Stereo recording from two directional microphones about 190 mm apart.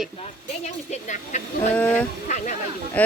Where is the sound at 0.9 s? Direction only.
40° left (ahead or behind).